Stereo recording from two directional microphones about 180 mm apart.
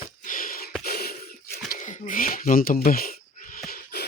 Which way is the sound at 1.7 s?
45° left (ahead or behind).